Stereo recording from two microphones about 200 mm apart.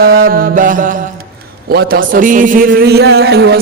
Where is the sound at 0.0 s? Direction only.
50° right (ahead or behind).